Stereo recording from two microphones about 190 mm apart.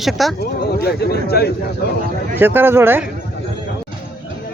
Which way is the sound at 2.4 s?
10° right (ahead or behind).